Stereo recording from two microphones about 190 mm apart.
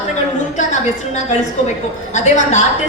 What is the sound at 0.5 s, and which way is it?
A woman's voice, 35° left (ahead or behind).